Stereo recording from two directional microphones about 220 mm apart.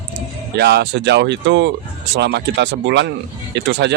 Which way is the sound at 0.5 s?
50° right (ahead or behind).